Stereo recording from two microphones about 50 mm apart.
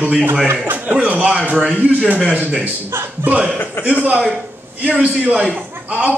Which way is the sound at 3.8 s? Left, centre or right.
Left.